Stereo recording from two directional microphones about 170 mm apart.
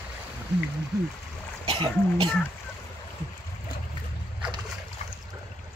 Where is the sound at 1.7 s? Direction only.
30° right (ahead or behind).